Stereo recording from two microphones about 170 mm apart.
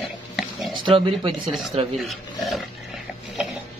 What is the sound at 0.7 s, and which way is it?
Speech, 30° right (ahead or behind).